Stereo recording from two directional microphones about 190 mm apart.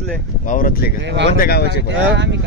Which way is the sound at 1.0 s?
65° right (ahead or behind).